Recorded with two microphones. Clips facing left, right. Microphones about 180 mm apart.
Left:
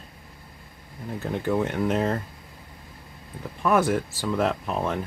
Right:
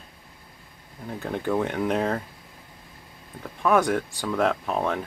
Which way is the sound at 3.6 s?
5° left (ahead or behind).